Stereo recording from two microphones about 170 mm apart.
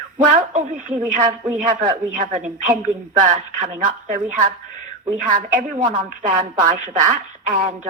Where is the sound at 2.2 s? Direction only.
45° right (ahead or behind).